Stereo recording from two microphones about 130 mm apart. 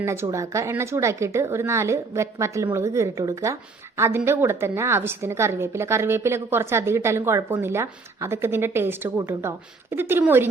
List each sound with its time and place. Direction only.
0.0 s a woman's voice: 20° right (ahead or behind)